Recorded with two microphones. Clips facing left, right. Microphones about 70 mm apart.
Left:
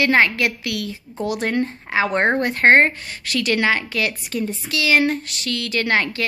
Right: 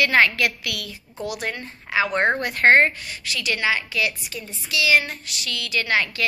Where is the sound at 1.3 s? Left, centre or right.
Left.